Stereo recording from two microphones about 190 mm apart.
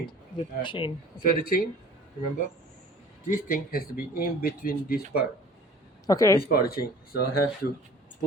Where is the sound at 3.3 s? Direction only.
45° left (ahead or behind).